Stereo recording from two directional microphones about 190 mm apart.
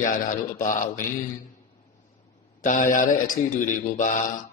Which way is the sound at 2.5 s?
45° left (ahead or behind).